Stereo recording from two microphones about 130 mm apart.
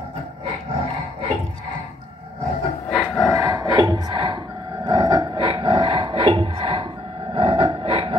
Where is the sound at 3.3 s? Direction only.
25° right (ahead or behind).